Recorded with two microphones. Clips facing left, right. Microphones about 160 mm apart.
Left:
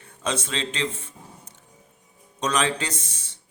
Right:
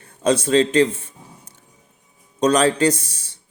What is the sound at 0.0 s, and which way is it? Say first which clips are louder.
Speech: right 10 dB; 40° right (ahead or behind).